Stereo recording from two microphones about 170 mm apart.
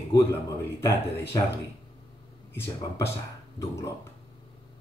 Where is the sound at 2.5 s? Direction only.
15° left (ahead or behind).